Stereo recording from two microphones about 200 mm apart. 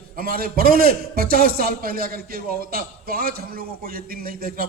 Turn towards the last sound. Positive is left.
turn(degrees=-45)  # may be behind; listen again after turning